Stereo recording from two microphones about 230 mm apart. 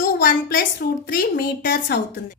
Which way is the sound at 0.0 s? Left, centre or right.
Left.